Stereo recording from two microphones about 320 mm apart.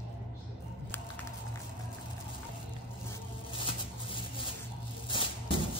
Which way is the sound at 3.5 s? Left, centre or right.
Centre.